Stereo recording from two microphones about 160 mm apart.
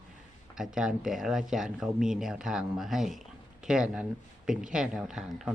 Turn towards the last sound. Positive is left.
turn(degrees=-5)  # may be behind; listen again after turning